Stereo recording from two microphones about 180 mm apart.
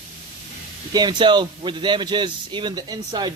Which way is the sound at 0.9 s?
25° right (ahead or behind).